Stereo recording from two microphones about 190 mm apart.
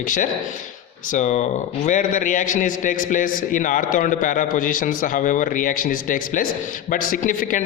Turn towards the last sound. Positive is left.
turn(degrees=45)  # may be behind; listen again after turning